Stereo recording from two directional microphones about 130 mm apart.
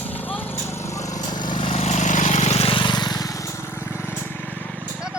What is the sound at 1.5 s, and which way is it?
Vehicle, 40° left (ahead or behind).